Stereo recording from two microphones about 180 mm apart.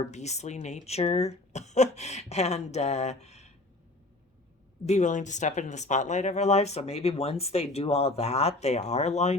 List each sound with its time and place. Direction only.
0.1 s speech: 40° left (ahead or behind)
4.9 s speech: 40° left (ahead or behind)